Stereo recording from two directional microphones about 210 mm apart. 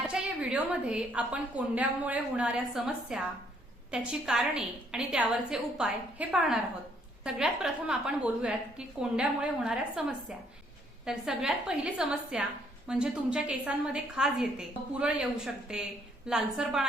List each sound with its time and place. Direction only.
0.1 s a woman's voice: 5° right (ahead or behind)